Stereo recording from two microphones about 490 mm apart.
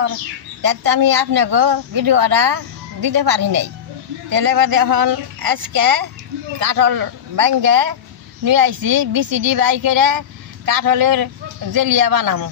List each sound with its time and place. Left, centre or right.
0.6 s a woman's voice: right